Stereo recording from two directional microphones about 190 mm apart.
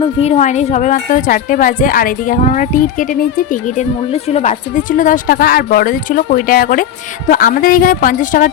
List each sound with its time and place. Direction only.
0.0 s speech: 35° left (ahead or behind)